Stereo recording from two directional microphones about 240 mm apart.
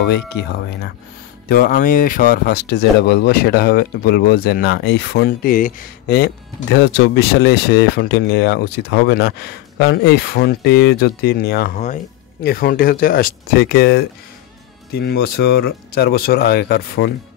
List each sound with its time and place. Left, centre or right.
0.0 s speech: left
11.7 s speech: left